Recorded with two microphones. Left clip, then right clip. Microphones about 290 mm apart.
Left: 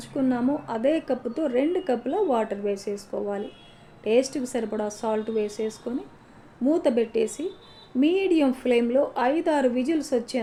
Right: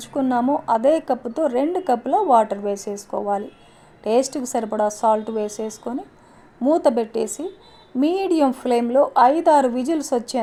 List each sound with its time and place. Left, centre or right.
0.0 s a woman's voice: right